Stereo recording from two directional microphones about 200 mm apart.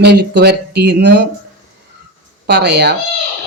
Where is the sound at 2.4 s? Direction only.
55° right (ahead or behind).